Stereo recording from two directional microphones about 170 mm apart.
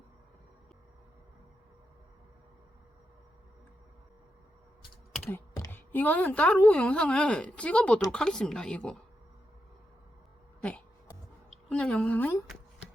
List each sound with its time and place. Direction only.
5.3 s a woman's voice: 15° left (ahead or behind)
10.6 s a woman's voice: 5° left (ahead or behind)